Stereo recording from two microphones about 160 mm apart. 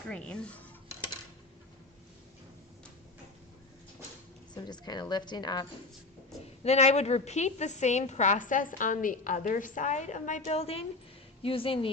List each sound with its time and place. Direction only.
0.1 s speech: 5° left (ahead or behind)
4.5 s a woman's voice: 25° left (ahead or behind)
6.4 s a woman's voice: 40° left (ahead or behind)